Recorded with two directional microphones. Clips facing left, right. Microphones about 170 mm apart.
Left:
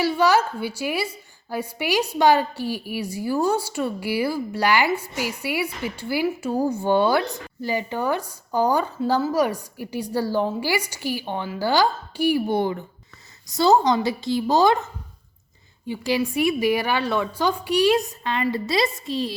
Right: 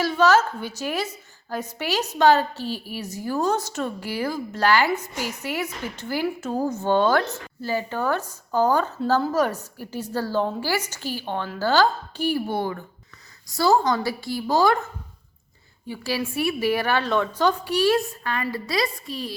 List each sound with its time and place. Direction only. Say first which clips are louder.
0.0 s a woman's voice: even; 10° left (ahead or behind)
15.9 s a woman's voice: left 4 dB; 15° left (ahead or behind)